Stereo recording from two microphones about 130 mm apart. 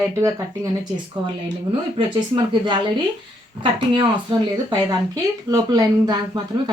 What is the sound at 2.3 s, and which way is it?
Speech, 35° right (ahead or behind).